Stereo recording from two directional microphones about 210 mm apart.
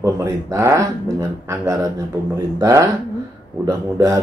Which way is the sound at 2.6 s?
15° right (ahead or behind).